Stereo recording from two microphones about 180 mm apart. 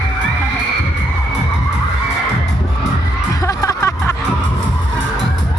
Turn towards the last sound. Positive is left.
turn(degrees=15)  # may be behind; listen again after turning